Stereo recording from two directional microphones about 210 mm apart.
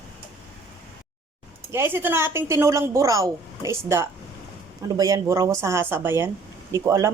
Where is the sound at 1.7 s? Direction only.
10° right (ahead or behind).